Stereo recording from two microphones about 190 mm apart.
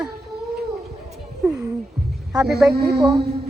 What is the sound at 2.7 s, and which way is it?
Speech, 55° right (ahead or behind).